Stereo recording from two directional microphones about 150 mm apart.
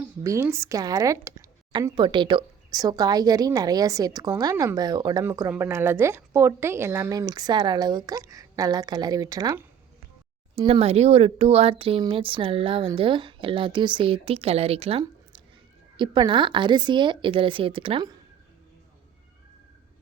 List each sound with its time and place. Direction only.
0.2 s speech: 20° right (ahead or behind)
2.0 s a woman's voice: 30° right (ahead or behind)
10.7 s a woman's voice: 45° right (ahead or behind)